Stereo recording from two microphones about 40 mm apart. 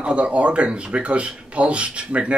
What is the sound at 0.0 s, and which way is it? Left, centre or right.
Speech, right.